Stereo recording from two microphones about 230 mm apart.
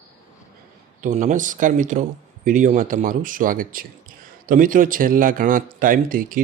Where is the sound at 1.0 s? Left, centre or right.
Right.